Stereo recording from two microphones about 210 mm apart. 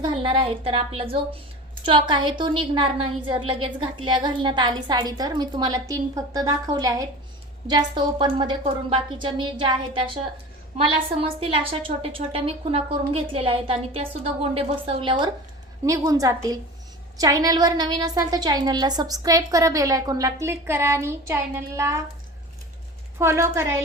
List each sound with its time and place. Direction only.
0.0 s a woman's voice: 25° right (ahead or behind)
10.8 s a woman's voice: 25° right (ahead or behind)
23.1 s a woman's voice: 10° right (ahead or behind)